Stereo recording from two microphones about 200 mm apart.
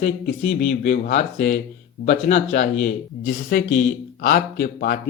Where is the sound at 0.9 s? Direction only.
40° left (ahead or behind).